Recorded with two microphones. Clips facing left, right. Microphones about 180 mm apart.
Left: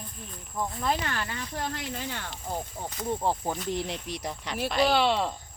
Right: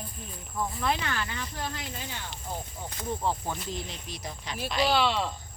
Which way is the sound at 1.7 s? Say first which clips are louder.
Left 4 dB; 60° left (ahead or behind).